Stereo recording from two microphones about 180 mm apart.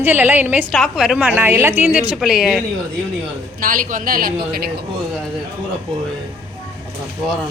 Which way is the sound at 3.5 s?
50° right (ahead or behind).